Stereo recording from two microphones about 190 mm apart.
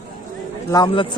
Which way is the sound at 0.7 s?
20° left (ahead or behind).